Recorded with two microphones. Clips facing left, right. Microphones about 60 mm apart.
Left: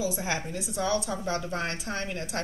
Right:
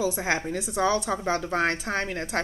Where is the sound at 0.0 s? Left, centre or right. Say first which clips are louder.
Right 4 dB; right.